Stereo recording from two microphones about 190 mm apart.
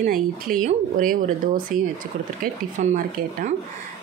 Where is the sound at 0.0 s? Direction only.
45° right (ahead or behind).